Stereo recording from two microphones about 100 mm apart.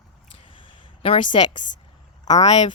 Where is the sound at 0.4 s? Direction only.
60° left (ahead or behind).